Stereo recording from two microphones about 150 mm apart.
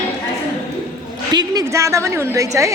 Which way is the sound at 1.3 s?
25° right (ahead or behind).